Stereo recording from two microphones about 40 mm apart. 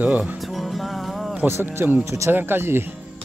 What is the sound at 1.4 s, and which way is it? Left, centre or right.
Speech, right.